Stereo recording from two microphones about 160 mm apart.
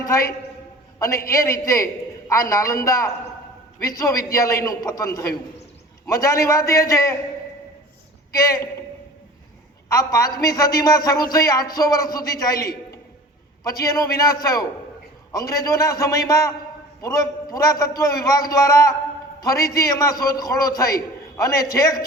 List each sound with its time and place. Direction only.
0.0 s a man's voice: 20° left (ahead or behind)
8.3 s a woman's voice: 20° left (ahead or behind)
9.9 s a man's voice: 20° left (ahead or behind)
13.7 s a man's voice: 20° left (ahead or behind)